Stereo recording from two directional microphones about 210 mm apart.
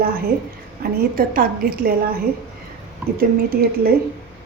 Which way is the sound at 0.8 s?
45° right (ahead or behind).